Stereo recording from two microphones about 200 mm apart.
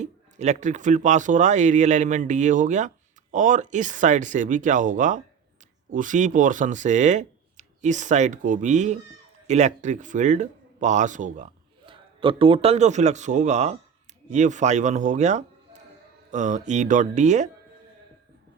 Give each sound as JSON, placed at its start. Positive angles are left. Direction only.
{"t": 0.0, "sound": "speech", "side_deg": -35}
{"t": 11.9, "sound": "speech", "side_deg": -25}